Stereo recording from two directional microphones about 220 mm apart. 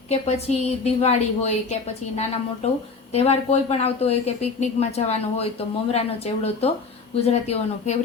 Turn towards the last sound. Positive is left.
turn(degrees=30)  # may be behind; listen again after turning